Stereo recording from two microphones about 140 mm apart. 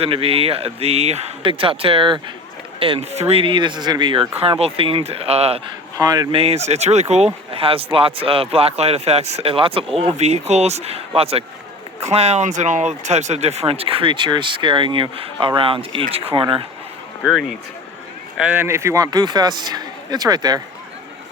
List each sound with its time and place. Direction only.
0.0 s speech: 40° right (ahead or behind)
4.4 s speech: 45° right (ahead or behind)
6.0 s a man's voice: 25° right (ahead or behind)
6.3 s speech: 45° right (ahead or behind)
18.3 s a man's voice: 15° right (ahead or behind)